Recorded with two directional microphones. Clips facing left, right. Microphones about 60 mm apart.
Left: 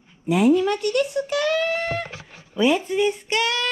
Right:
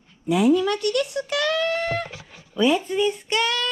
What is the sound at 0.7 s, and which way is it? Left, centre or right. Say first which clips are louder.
Speech: left 2 dB; right.